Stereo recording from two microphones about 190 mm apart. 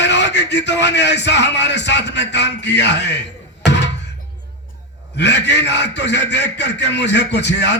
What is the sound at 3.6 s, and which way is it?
Music, 65° left (ahead or behind).